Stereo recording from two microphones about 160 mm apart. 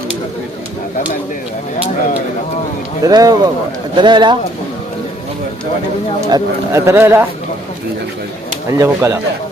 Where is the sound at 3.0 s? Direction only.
20° right (ahead or behind).